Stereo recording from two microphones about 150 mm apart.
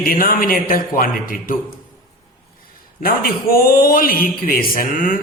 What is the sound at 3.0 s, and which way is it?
A man's voice, 80° left.